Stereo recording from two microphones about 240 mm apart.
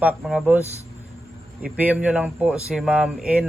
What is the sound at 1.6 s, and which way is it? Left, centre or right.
Speech, centre.